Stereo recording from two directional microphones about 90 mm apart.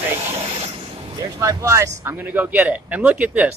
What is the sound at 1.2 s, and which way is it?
Speech, 40° right (ahead or behind).